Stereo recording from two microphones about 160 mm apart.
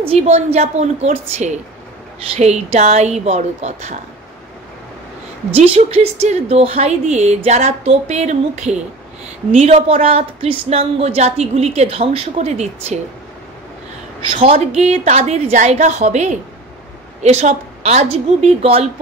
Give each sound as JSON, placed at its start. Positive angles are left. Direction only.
{"t": 0.0, "sound": "a woman's voice", "side_deg": -40}
{"t": 2.3, "sound": "a woman's voice", "side_deg": -45}
{"t": 5.5, "sound": "a woman's voice", "side_deg": -40}
{"t": 14.3, "sound": "a woman's voice", "side_deg": -40}